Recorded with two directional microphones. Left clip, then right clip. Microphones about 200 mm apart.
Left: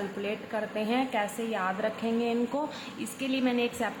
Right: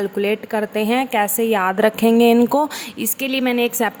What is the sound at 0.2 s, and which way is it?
A woman's voice, 55° right (ahead or behind).